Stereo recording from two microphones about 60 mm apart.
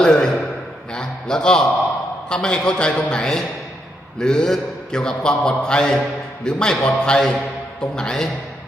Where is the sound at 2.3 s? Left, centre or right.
Centre.